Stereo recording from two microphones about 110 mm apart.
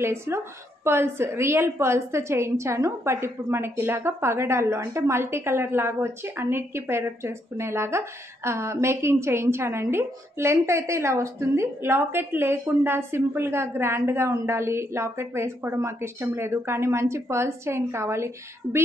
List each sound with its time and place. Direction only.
0.0 s a woman's voice: 25° right (ahead or behind)